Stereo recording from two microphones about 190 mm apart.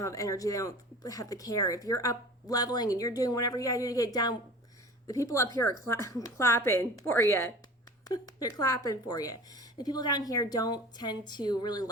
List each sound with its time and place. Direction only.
0.0 s a woman's voice: 15° left (ahead or behind)